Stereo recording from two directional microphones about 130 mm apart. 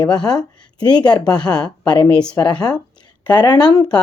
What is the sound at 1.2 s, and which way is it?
A woman's voice, 5° left (ahead or behind).